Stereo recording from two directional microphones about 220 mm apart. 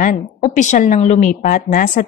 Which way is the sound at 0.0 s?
35° left (ahead or behind).